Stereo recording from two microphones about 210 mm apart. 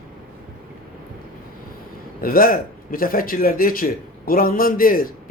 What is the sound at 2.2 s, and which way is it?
Speech, 45° left (ahead or behind).